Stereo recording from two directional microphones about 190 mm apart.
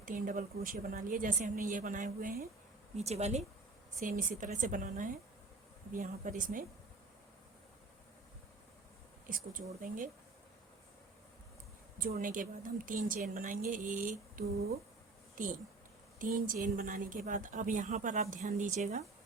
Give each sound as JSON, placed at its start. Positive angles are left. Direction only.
{"t": 0.0, "sound": "speech", "side_deg": -45}
{"t": 9.3, "sound": "speech", "side_deg": -45}
{"t": 11.9, "sound": "speech", "side_deg": -45}